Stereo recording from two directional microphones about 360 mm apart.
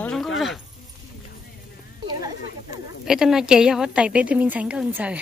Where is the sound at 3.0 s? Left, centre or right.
Centre.